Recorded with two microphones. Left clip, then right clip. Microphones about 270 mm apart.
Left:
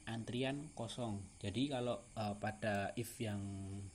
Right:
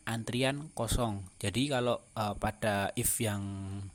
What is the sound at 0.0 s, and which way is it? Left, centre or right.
Speech, right.